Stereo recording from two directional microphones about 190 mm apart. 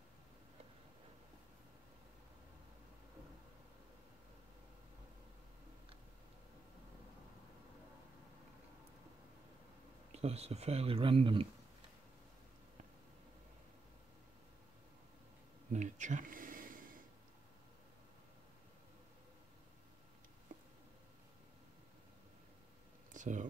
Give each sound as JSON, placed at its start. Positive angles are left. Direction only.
{"t": 10.1, "sound": "speech", "side_deg": -35}
{"t": 15.7, "sound": "a sound", "side_deg": -40}
{"t": 23.1, "sound": "speech", "side_deg": -40}